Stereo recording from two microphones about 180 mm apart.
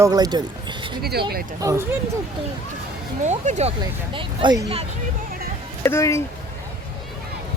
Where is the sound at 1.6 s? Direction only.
15° right (ahead or behind).